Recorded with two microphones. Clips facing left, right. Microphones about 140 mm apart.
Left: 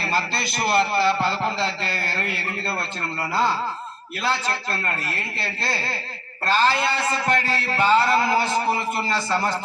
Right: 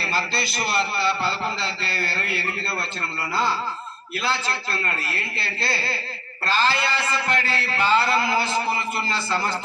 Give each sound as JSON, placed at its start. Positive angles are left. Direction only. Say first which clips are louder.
{"t": 0.0, "sound": "a man's voice", "louder": "left 1 dB", "side_deg": 50}
{"t": 4.2, "sound": "a man's voice", "louder": "left 2 dB", "side_deg": 45}